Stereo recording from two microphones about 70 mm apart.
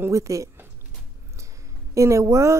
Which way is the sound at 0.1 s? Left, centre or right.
Right.